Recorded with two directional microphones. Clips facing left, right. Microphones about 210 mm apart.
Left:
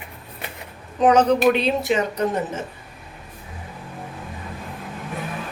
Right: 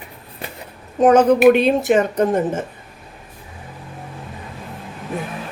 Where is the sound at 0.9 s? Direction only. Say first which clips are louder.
Right 4 dB; 50° right (ahead or behind).